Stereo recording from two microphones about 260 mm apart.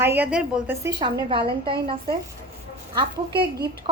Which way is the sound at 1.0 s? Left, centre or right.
Centre.